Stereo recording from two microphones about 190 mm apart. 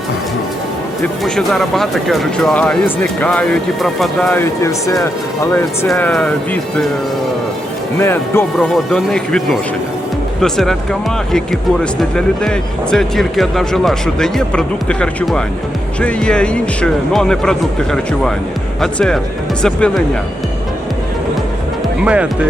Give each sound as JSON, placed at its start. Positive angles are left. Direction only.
{"t": 1.2, "sound": "speech", "side_deg": 0}
{"t": 5.9, "sound": "speech", "side_deg": 5}
{"t": 7.9, "sound": "speech", "side_deg": 10}
{"t": 8.5, "sound": "speech", "side_deg": 0}
{"t": 22.0, "sound": "speech", "side_deg": -5}